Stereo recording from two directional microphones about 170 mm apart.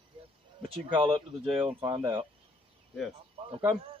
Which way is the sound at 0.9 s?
30° right (ahead or behind).